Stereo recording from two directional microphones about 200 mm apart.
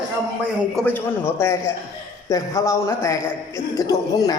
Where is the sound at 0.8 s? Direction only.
10° left (ahead or behind).